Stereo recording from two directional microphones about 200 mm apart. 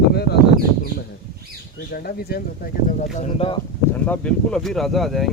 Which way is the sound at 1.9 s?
50° left (ahead or behind).